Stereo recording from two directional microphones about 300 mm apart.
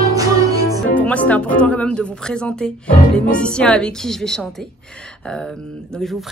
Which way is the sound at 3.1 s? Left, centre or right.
Centre.